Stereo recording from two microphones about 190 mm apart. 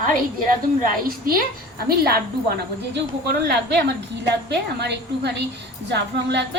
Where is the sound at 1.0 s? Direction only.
50° right (ahead or behind).